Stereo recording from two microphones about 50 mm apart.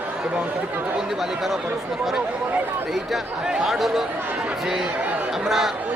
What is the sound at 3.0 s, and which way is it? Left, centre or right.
Speech, centre.